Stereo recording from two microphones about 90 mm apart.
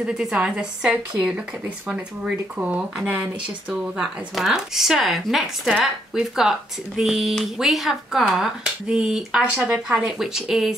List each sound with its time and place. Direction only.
0.0 s speech: 10° right (ahead or behind)